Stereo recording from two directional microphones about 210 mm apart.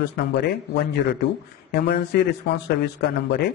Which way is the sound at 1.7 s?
55° left (ahead or behind).